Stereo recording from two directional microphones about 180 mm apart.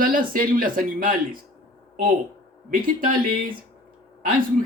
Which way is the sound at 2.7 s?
50° right (ahead or behind).